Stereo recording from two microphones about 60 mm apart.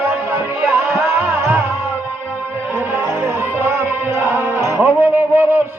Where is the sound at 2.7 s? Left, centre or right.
Right.